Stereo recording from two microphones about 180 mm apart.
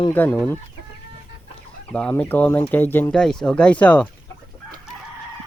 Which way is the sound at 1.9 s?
5° left (ahead or behind).